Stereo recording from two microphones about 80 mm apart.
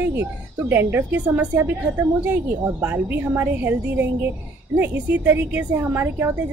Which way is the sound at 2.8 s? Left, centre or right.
Right.